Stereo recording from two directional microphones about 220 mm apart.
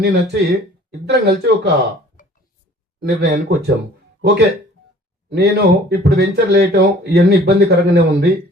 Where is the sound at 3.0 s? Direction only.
50° right (ahead or behind).